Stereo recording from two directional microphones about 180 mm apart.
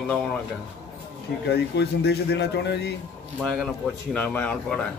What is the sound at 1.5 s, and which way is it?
Speech, 60° left (ahead or behind).